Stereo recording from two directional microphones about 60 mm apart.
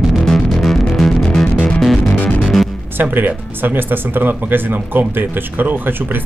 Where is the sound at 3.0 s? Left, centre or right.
Right.